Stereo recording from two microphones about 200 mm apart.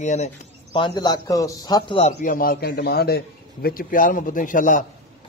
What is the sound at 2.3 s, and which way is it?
A man's voice, 50° left (ahead or behind).